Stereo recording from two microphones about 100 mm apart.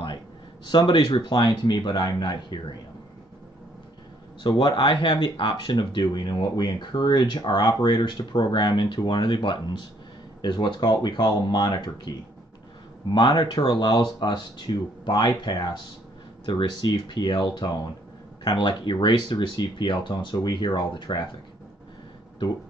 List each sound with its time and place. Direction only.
0.7 s speech: 50° left (ahead or behind)
4.4 s speech: 50° left (ahead or behind)
13.1 s speech: 45° left (ahead or behind)